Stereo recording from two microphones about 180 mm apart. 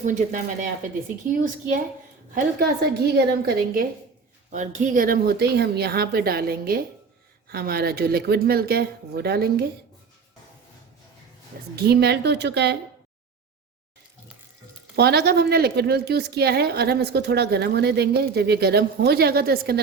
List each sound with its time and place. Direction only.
0.0 s speech: 45° right (ahead or behind)
2.3 s a woman's voice: 60° right (ahead or behind)
4.5 s a woman's voice: 45° right (ahead or behind); by 9.6 s 60° right (ahead or behind)
11.8 s speech: 65° right (ahead or behind)
14.9 s a woman's voice: 65° right (ahead or behind)